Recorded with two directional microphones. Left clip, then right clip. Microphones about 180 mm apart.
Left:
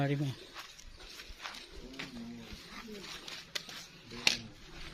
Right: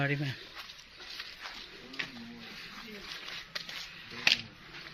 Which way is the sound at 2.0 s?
65° left (ahead or behind).